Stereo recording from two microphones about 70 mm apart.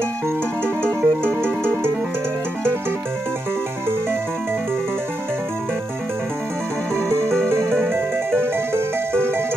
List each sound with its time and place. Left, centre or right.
0.8 s music: right
7.4 s music: right